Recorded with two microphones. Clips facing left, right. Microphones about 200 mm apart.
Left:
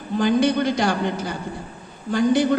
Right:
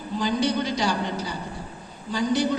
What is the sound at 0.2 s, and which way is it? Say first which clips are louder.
A woman's voice: left 6 dB; 55° left (ahead or behind).